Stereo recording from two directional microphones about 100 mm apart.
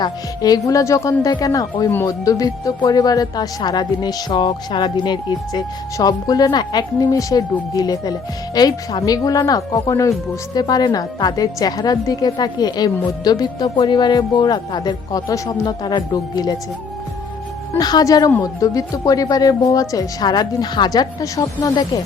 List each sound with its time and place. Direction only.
0.0 s speech: 40° left (ahead or behind)
17.7 s speech: 40° left (ahead or behind)